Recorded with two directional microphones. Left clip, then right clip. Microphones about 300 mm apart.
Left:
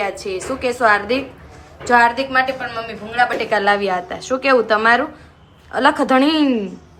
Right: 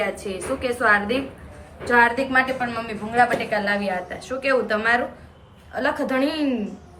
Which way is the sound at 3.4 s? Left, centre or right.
Centre.